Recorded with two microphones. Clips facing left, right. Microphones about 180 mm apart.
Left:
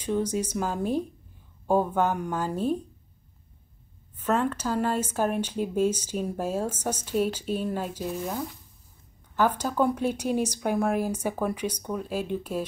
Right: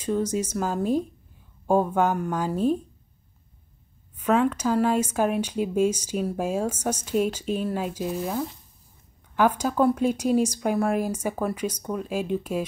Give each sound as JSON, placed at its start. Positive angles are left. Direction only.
{"t": 0.0, "sound": "speech", "side_deg": 10}
{"t": 0.6, "sound": "speech", "side_deg": -5}
{"t": 4.2, "sound": "speech", "side_deg": -10}
{"t": 11.3, "sound": "speech", "side_deg": 5}
{"t": 11.7, "sound": "speech", "side_deg": -5}